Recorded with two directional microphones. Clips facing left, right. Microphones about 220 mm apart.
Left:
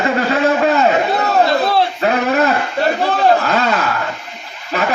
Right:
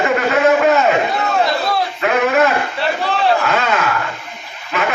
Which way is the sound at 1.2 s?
35° left (ahead or behind).